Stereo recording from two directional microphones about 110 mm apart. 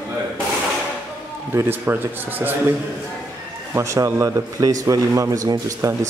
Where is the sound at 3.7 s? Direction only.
25° right (ahead or behind).